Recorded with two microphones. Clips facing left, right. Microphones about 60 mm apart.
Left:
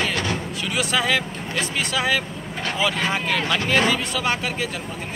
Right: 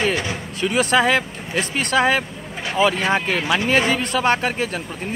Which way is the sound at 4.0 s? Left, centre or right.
Right.